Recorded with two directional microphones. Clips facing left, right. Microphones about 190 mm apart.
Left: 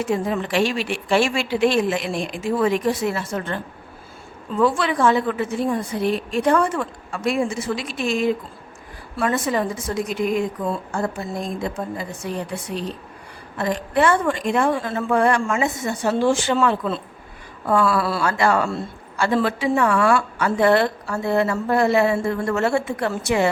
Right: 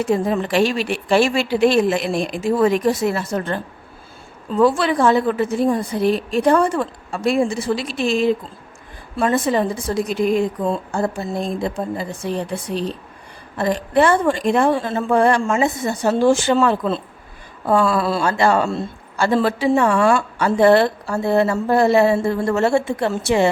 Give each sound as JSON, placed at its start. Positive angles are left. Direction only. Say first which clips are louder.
{"t": 0.0, "sound": "a woman's voice", "louder": "right 4 dB", "side_deg": -35}